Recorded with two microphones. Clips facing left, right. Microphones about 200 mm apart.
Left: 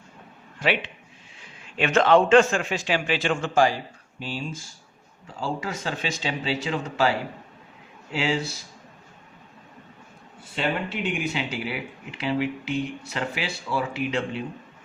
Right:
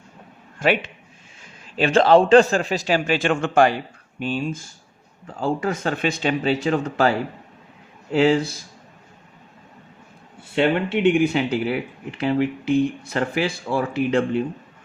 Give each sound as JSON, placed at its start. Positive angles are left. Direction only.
{"t": 0.6, "sound": "a man's voice", "side_deg": -45}
{"t": 8.1, "sound": "speech", "side_deg": -55}
{"t": 10.8, "sound": "speech", "side_deg": -60}